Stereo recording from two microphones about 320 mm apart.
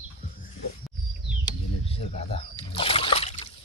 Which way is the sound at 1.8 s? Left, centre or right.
Centre.